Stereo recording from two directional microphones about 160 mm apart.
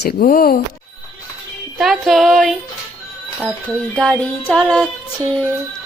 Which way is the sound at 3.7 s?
5° left (ahead or behind).